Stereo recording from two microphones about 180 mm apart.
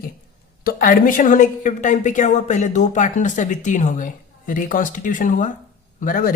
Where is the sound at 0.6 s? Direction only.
50° left (ahead or behind).